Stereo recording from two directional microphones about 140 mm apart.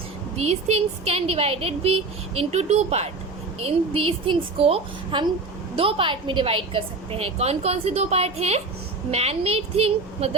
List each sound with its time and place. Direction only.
0.3 s a woman's voice: 50° right (ahead or behind)